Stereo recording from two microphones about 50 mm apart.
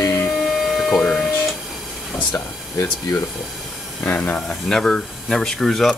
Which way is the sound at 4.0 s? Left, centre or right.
Left.